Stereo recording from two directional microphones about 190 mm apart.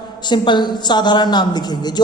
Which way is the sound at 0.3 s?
25° left (ahead or behind).